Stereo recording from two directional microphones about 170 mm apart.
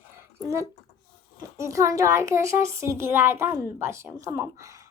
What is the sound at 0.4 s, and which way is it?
A child's voice, 20° right (ahead or behind).